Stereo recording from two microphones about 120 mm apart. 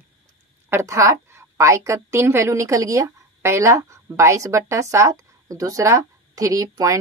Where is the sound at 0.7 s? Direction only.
25° right (ahead or behind).